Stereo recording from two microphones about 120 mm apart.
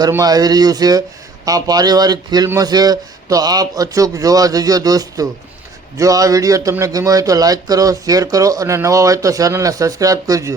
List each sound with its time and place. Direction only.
0.2 s a man's voice: 30° right (ahead or behind)